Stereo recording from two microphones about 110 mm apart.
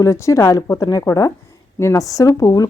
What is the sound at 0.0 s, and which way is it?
Speech, 25° left (ahead or behind).